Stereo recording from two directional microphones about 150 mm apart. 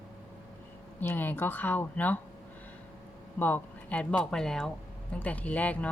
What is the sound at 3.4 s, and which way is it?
A woman's voice, 10° left (ahead or behind).